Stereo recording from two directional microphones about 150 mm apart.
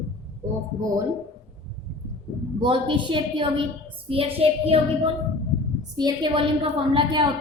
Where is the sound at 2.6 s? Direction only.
35° right (ahead or behind).